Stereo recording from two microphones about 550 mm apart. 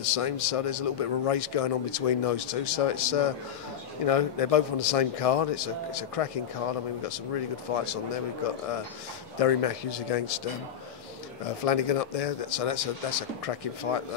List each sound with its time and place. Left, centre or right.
0.1 s a man's voice: left
9.4 s speech: left
11.6 s speech: left
13.9 s speech: left